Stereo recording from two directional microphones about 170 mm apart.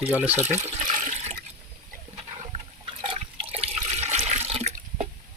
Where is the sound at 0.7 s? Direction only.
45° right (ahead or behind).